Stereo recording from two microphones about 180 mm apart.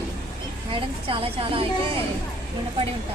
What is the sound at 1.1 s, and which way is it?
Speech, 30° right (ahead or behind).